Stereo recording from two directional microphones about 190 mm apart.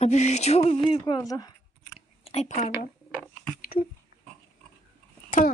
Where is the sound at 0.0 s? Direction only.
35° left (ahead or behind).